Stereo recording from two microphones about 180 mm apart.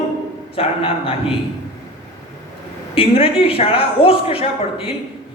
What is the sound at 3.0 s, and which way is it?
A man's voice, 30° left (ahead or behind).